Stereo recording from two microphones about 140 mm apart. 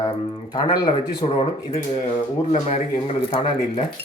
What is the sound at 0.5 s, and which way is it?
Speech, 35° left (ahead or behind).